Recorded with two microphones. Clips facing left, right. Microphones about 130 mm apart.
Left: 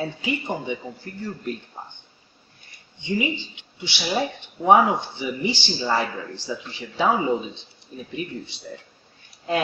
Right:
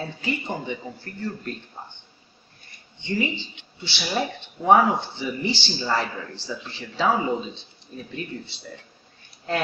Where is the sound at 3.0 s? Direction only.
15° left (ahead or behind).